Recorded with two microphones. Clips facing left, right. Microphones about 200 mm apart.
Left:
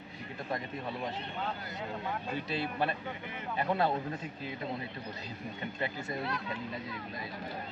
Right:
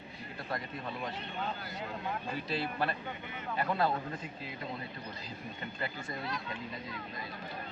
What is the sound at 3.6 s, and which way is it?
Speech, 25° left (ahead or behind).